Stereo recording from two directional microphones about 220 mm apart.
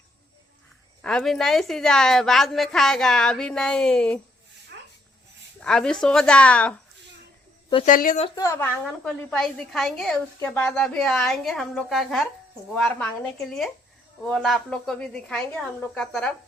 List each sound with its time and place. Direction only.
1.0 s a woman's voice: centre (ahead or behind)
5.5 s a woman's voice: 5° left (ahead or behind)
7.9 s speech: 40° left (ahead or behind)
8.4 s a woman's voice: 10° left (ahead or behind)
8.7 s a woman's voice: centre (ahead or behind)